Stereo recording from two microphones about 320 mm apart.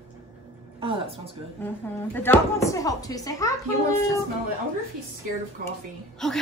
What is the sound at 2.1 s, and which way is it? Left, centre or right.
Speech, centre.